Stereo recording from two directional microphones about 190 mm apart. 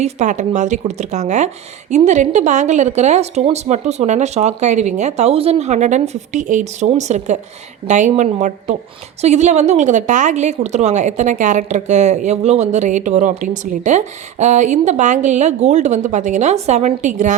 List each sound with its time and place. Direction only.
0.0 s a woman's voice: 40° right (ahead or behind)